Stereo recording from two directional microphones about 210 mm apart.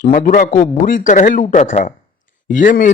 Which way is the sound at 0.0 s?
40° left (ahead or behind).